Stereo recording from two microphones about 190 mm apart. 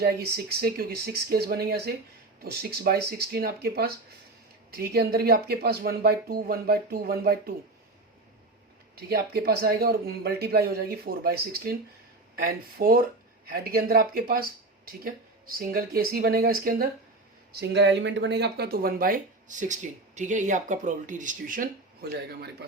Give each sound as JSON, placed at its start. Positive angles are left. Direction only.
{"t": 0.4, "sound": "speech", "side_deg": -55}
{"t": 9.0, "sound": "speech", "side_deg": -55}